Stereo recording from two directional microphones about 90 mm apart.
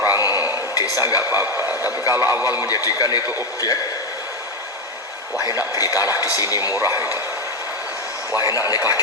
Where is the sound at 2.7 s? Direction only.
45° left (ahead or behind).